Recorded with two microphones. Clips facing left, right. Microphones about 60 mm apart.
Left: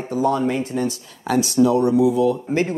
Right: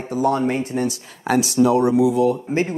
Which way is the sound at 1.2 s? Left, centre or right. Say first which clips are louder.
Even; right.